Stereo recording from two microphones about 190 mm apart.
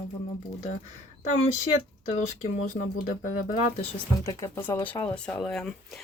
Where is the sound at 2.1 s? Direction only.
35° left (ahead or behind).